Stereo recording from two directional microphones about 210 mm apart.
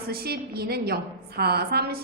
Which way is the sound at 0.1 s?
45° right (ahead or behind).